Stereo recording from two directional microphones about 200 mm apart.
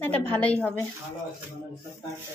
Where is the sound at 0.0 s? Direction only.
10° left (ahead or behind).